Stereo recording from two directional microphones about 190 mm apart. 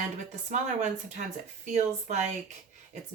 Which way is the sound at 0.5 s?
40° right (ahead or behind).